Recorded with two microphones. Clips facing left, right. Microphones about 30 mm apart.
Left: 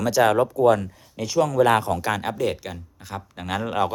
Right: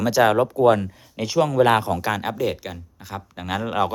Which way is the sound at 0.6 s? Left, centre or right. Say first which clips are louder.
Right 2 dB; right.